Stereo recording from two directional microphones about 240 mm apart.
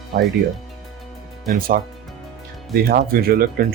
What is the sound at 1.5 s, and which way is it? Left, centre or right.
Speech, right.